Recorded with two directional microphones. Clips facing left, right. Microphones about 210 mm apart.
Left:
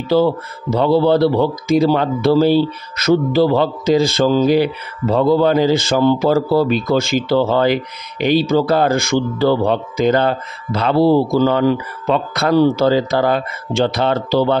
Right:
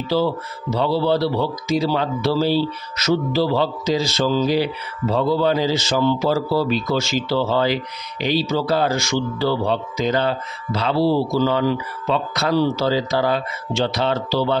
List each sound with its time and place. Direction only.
0.1 s speech: 55° left (ahead or behind)